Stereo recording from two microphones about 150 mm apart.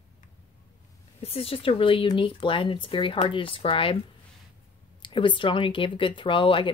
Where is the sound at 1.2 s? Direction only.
40° left (ahead or behind).